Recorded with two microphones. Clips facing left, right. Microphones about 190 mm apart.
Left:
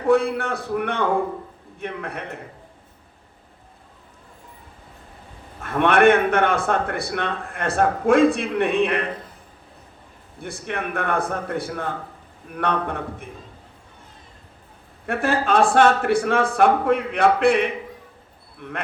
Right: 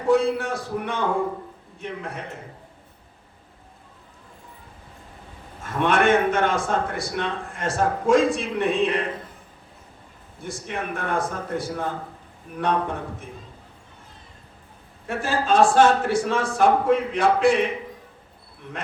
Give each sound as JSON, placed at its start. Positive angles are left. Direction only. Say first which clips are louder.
{"t": 0.1, "sound": "a man's voice", "louder": "left 1 dB", "side_deg": 60}
{"t": 5.8, "sound": "a man's voice", "louder": "left 3 dB", "side_deg": 60}
{"t": 10.4, "sound": "a man's voice", "louder": "left 2 dB", "side_deg": 60}
{"t": 15.0, "sound": "a man's voice", "louder": "left 3 dB", "side_deg": 60}